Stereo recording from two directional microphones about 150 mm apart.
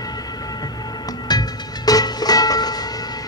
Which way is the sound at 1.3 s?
25° left (ahead or behind).